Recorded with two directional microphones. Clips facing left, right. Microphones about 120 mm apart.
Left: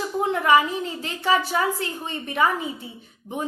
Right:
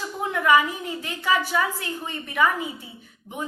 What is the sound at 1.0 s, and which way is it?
A woman's voice, 30° left (ahead or behind).